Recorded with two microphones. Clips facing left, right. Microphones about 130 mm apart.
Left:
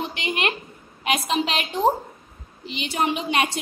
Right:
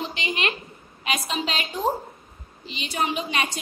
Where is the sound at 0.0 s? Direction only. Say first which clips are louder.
Left 2 dB; 60° left (ahead or behind).